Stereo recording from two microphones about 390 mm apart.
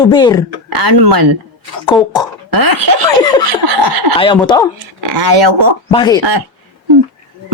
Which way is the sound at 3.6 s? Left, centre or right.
Right.